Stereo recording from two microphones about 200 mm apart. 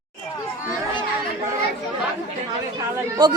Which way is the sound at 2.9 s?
20° right (ahead or behind).